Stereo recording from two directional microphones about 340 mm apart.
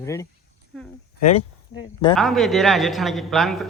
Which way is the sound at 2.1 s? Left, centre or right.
Centre.